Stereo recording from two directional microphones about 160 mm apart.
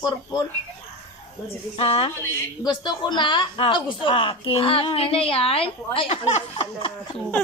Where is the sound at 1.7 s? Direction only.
35° left (ahead or behind).